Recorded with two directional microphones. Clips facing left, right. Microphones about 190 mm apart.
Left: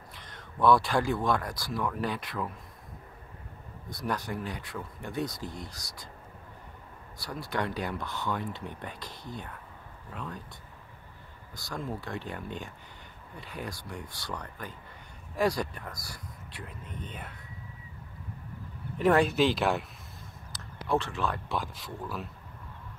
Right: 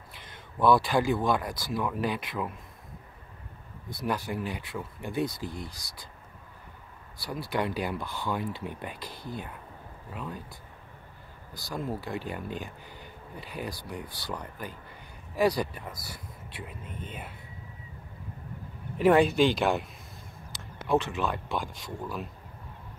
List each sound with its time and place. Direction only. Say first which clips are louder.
0.2 s speech: right 1 dB; 5° right (ahead or behind)
3.9 s speech: right 2 dB; centre (ahead or behind)
7.2 s speech: right 2 dB; centre (ahead or behind)
11.5 s speech: right 3 dB; centre (ahead or behind)
18.9 s speech: right 3 dB; 5° right (ahead or behind)
20.8 s speech: right 2 dB; 20° right (ahead or behind)
21.5 s speech: right 1 dB; centre (ahead or behind)